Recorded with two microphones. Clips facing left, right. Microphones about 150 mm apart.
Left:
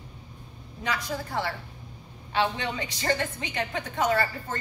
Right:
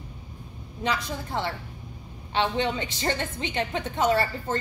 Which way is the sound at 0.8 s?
25° right (ahead or behind).